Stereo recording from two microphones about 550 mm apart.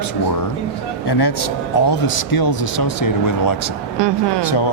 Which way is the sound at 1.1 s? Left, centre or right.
Left.